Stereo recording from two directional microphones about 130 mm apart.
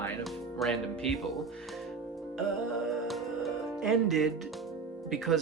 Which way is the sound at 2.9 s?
Centre (ahead or behind).